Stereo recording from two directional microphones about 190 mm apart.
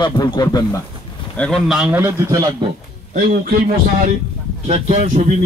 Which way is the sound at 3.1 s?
50° right (ahead or behind).